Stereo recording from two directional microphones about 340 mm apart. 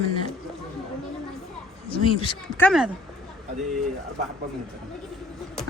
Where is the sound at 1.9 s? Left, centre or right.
Centre.